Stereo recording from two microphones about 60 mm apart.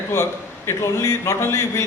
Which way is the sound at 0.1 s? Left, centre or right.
Left.